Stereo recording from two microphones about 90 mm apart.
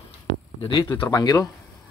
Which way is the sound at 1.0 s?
45° left (ahead or behind).